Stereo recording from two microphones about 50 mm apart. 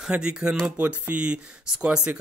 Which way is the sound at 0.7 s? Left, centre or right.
Right.